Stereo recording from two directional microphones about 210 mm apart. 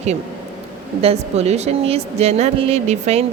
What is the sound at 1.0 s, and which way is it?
A woman's voice, 30° right (ahead or behind).